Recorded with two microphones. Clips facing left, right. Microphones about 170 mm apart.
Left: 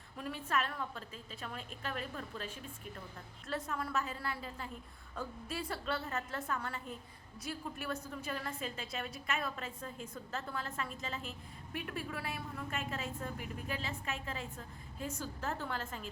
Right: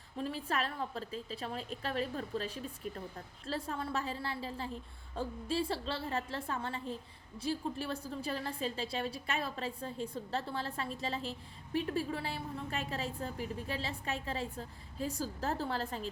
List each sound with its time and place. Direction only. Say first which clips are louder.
0.2 s a woman's voice: right 1 dB; 30° right (ahead or behind)